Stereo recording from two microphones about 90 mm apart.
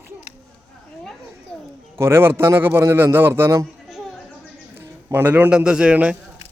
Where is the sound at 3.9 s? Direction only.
Centre (ahead or behind).